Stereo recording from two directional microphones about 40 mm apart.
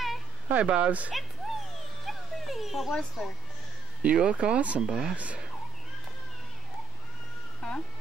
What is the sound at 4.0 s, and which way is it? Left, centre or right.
Speech, right.